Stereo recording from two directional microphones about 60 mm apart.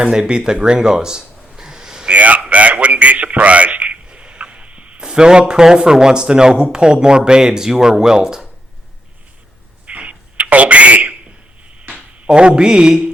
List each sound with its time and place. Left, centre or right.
0.0 s speech: centre
2.0 s a man's voice: right
9.8 s a sound: right